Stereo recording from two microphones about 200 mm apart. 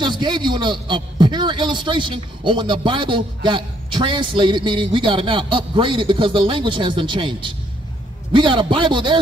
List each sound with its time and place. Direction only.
0.0 s a man's voice: 20° right (ahead or behind)